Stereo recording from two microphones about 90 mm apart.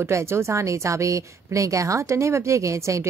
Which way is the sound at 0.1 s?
30° right (ahead or behind).